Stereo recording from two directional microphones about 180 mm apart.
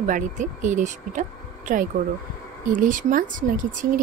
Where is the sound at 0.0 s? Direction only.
45° right (ahead or behind).